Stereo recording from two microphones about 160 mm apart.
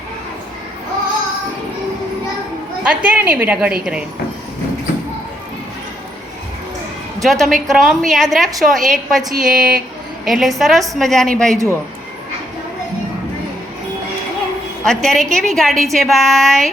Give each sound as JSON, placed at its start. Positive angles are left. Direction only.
{"t": 2.8, "sound": "a woman's voice", "side_deg": -10}
{"t": 7.2, "sound": "a woman's voice", "side_deg": 0}
{"t": 11.5, "sound": "a woman's voice", "side_deg": -20}
{"t": 14.8, "sound": "a woman's voice", "side_deg": 0}